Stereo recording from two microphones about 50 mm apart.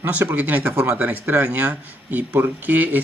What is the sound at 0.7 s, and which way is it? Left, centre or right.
Speech, right.